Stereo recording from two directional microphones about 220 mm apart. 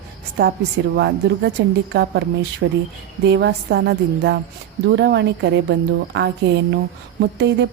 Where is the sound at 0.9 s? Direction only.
50° right (ahead or behind).